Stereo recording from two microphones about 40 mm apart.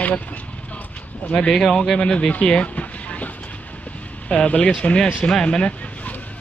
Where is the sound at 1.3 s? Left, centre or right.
Centre.